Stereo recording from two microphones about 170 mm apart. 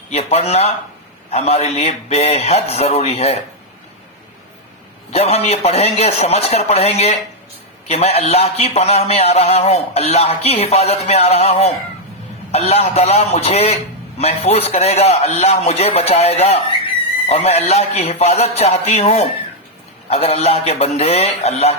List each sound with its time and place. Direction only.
0.1 s a man's voice: 40° left (ahead or behind)
5.1 s a man's voice: 40° left (ahead or behind)